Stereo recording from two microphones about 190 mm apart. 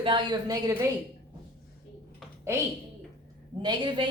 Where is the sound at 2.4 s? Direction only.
15° right (ahead or behind).